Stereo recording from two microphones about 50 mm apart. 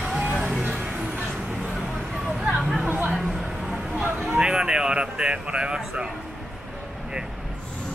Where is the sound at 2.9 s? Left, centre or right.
Right.